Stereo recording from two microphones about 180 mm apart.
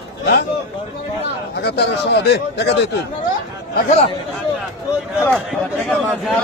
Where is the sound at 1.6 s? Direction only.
65° left (ahead or behind).